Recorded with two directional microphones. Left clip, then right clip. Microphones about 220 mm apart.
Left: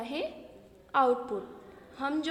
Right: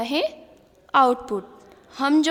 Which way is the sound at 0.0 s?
35° right (ahead or behind).